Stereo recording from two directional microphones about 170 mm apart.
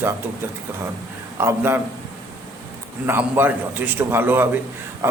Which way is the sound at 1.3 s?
15° right (ahead or behind).